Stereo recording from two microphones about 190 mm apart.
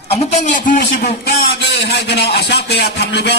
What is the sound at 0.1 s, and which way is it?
A man's voice, 35° left (ahead or behind).